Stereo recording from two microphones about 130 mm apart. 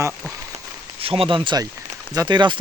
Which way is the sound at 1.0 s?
45° right (ahead or behind).